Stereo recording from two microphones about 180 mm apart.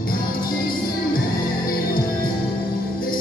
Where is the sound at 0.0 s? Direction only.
55° left (ahead or behind).